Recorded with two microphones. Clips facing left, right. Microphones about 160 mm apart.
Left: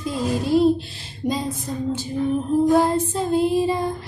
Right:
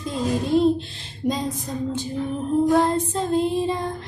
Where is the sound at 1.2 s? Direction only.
45° left (ahead or behind).